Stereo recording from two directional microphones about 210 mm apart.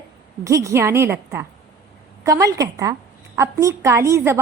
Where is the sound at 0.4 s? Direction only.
15° right (ahead or behind).